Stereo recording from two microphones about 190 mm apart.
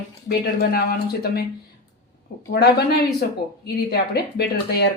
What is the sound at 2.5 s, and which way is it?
Speech, 55° left (ahead or behind).